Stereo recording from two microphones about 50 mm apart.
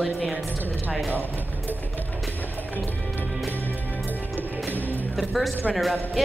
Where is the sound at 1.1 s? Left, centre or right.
Right.